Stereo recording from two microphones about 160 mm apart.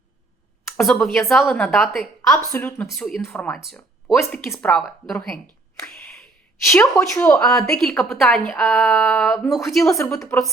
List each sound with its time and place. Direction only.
0.8 s a woman's voice: centre (ahead or behind)
6.7 s a woman's voice: centre (ahead or behind)
8.9 s a woman's voice: 15° left (ahead or behind)
9.3 s a woman's voice: 5° left (ahead or behind)
9.8 s a woman's voice: 20° left (ahead or behind)